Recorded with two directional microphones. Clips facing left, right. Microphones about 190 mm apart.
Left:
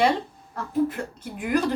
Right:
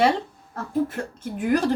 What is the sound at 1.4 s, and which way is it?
Speech, 45° right (ahead or behind).